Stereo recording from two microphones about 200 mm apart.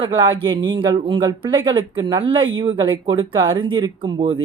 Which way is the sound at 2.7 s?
20° right (ahead or behind).